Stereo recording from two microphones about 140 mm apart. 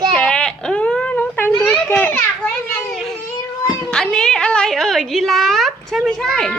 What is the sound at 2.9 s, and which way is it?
Baby cry, centre (ahead or behind).